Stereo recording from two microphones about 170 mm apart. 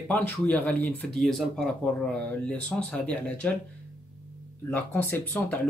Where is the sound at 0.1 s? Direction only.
10° left (ahead or behind).